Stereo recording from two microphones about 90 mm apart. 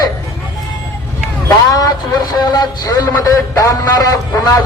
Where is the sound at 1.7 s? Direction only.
45° left (ahead or behind).